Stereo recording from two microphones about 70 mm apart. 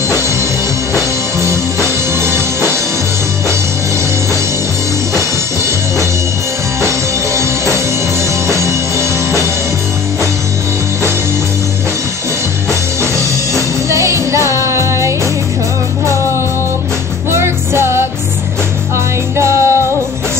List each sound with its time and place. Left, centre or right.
1.4 s music: right
7.3 s music: right
13.0 s music: right
17.3 s music: right
19.3 s music: right